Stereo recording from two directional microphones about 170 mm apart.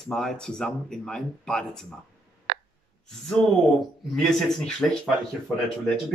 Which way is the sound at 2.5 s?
65° right (ahead or behind).